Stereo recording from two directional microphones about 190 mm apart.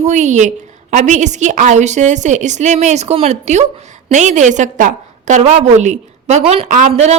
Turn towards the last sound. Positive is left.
turn(degrees=-35)  # may be behind; listen again after turning